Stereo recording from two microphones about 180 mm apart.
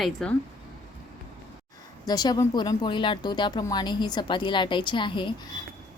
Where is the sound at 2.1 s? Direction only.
20° left (ahead or behind).